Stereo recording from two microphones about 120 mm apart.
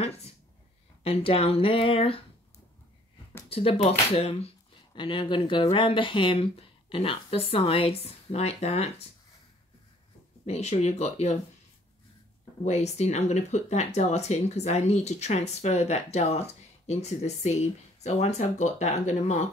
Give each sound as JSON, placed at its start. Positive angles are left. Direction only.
{"t": 0.0, "sound": "a sound", "side_deg": 60}
{"t": 1.0, "sound": "speech", "side_deg": 50}
{"t": 3.4, "sound": "speech", "side_deg": 55}
{"t": 4.9, "sound": "speech", "side_deg": 45}
{"t": 10.4, "sound": "speech", "side_deg": 65}
{"t": 12.6, "sound": "speech", "side_deg": 65}